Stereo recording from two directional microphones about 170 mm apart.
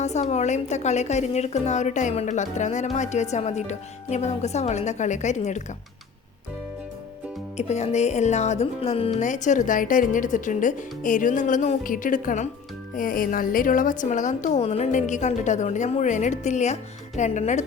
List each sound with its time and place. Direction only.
0.0 s a woman's voice: 40° left (ahead or behind)
7.5 s a woman's voice: 40° left (ahead or behind)